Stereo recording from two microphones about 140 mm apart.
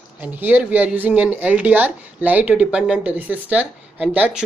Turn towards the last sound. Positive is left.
turn(degrees=-10)  # may be behind; listen again after turning